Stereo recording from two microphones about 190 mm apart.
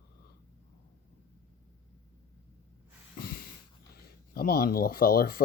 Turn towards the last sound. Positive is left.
turn(degrees=50)  # may be behind; listen again after turning